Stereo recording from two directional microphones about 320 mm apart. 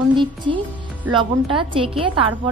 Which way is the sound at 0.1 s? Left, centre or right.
Centre.